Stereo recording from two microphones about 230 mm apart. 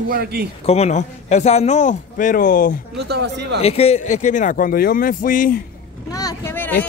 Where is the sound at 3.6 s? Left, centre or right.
Left.